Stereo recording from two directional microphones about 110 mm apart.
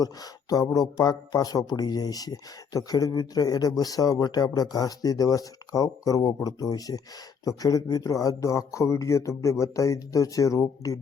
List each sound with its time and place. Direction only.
0.0 s speech: 35° left (ahead or behind)